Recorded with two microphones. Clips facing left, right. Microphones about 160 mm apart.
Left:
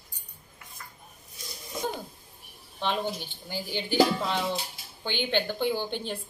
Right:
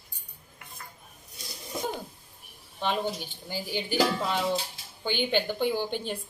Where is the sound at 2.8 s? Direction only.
5° right (ahead or behind).